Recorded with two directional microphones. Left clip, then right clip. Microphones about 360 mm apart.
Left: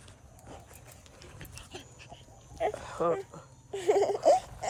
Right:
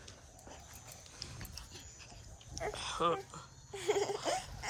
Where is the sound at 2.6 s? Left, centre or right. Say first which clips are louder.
Left 5 dB; centre.